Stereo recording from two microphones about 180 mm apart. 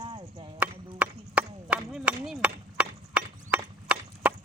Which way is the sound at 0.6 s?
10° right (ahead or behind).